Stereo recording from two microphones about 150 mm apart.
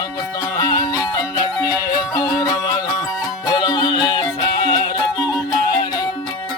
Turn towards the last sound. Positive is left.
turn(degrees=25)  # may be behind; listen again after turning